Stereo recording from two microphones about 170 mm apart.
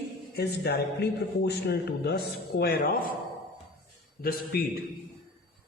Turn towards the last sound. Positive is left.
turn(degrees=65)  # may be behind; listen again after turning